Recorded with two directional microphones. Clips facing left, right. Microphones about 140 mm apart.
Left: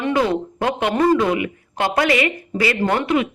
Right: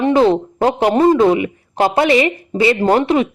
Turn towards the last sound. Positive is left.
turn(degrees=-30)  # may be behind; listen again after turning